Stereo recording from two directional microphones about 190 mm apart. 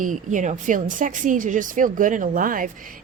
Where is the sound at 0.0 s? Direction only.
40° right (ahead or behind).